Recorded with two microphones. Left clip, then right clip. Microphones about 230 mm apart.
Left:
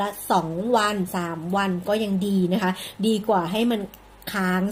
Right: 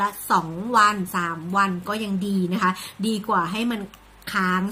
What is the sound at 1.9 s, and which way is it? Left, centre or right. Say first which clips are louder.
Speech: left 4 dB; left.